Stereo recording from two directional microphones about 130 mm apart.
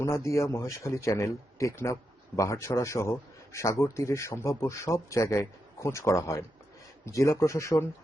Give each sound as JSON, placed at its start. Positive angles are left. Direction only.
{"t": 0.0, "sound": "speech", "side_deg": 25}